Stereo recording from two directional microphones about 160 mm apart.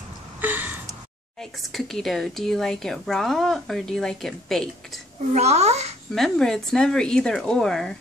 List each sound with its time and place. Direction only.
0.4 s gasp: 10° right (ahead or behind)
1.4 s speech: centre (ahead or behind)
5.3 s a child's voice: 45° right (ahead or behind)
6.1 s speech: 5° left (ahead or behind)